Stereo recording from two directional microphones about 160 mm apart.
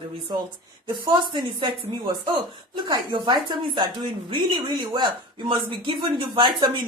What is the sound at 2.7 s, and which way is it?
Speech, 25° right (ahead or behind).